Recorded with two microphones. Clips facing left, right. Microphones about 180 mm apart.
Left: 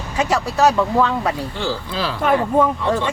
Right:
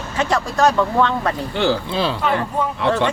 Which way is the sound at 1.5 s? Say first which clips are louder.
Right 5 dB; 75° right (ahead or behind).